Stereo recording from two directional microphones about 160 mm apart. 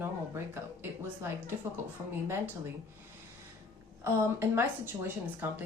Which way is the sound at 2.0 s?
25° right (ahead or behind).